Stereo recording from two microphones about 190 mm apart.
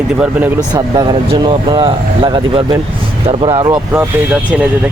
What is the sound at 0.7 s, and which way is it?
Speech, 20° right (ahead or behind).